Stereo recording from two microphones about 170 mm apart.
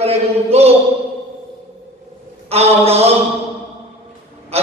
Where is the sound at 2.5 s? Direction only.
35° right (ahead or behind).